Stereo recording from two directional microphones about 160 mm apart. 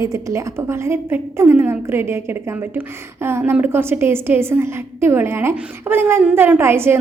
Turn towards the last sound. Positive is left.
turn(degrees=-15)  # may be behind; listen again after turning